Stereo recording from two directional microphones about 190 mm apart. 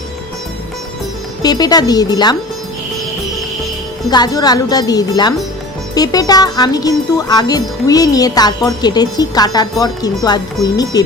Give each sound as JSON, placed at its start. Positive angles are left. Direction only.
{"t": 1.4, "sound": "speech", "side_deg": 20}
{"t": 4.1, "sound": "speech", "side_deg": 20}